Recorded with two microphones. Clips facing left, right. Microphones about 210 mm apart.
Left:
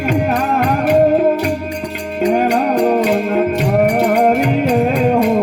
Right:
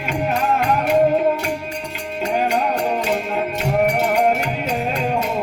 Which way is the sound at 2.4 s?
55° left (ahead or behind).